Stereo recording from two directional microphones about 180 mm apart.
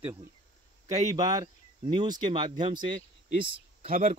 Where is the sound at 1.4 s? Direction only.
25° right (ahead or behind).